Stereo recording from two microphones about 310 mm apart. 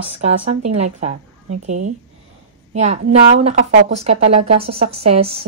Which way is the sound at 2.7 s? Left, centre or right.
Right.